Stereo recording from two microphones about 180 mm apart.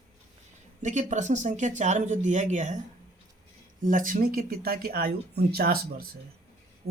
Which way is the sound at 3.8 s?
50° right (ahead or behind).